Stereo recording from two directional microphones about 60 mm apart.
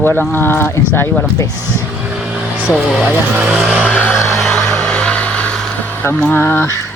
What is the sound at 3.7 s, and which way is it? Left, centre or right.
Vehicle, centre.